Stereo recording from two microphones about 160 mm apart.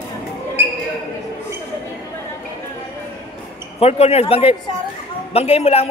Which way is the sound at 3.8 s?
40° left (ahead or behind).